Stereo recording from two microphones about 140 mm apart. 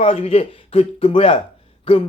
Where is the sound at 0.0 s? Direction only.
45° left (ahead or behind).